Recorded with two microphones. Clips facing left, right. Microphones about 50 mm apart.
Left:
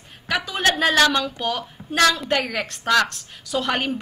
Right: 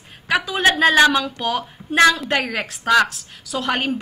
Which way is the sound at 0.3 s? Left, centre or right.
Centre.